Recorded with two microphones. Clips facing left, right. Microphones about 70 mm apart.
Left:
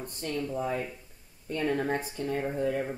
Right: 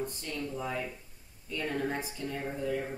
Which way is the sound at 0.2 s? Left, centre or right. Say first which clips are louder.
Left 6 dB; left.